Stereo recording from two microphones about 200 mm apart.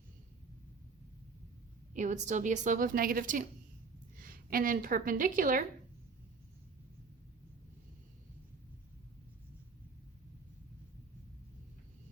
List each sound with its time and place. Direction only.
1.9 s a woman's voice: 40° right (ahead or behind)